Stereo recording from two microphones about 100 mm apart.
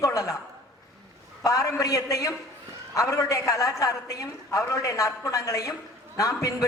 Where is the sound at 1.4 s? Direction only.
35° left (ahead or behind).